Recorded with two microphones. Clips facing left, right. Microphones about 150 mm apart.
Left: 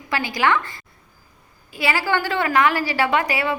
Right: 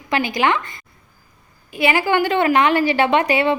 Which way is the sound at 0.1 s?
20° right (ahead or behind).